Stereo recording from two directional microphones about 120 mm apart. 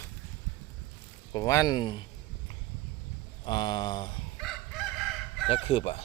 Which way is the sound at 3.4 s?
40° left (ahead or behind).